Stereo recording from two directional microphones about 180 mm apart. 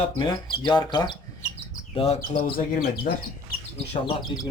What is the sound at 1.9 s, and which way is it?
Speech, 35° left (ahead or behind).